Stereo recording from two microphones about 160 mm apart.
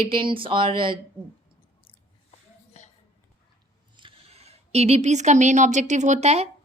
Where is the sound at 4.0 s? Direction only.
35° right (ahead or behind).